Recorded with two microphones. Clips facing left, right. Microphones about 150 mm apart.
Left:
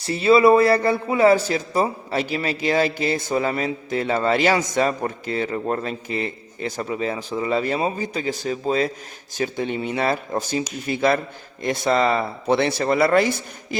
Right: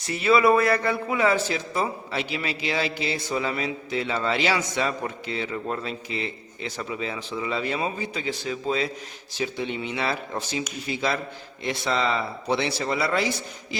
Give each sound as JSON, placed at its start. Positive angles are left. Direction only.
{"t": 0.0, "sound": "a man's voice", "side_deg": 30}